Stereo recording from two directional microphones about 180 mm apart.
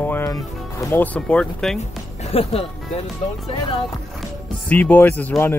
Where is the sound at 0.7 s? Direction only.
10° left (ahead or behind).